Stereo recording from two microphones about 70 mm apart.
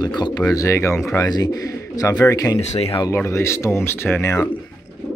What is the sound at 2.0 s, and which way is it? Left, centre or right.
Speech, left.